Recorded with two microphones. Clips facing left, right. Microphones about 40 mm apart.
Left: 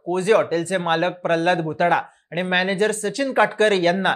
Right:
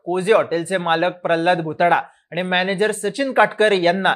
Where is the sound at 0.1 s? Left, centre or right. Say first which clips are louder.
Right 1 dB; centre.